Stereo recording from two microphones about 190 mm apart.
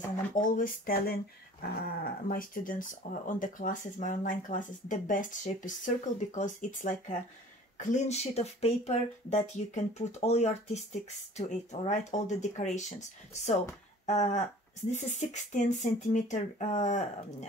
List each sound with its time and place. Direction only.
0.3 s speech: 45° left (ahead or behind)
14.0 s speech: 40° left (ahead or behind)